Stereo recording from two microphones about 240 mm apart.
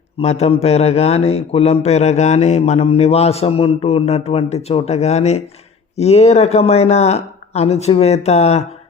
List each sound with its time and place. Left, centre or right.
0.2 s speech: left